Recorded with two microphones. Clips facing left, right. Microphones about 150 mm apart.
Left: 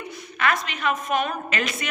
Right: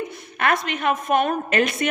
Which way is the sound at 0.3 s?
55° right (ahead or behind).